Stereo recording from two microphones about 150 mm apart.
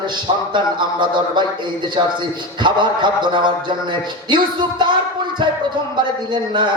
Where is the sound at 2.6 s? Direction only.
30° right (ahead or behind).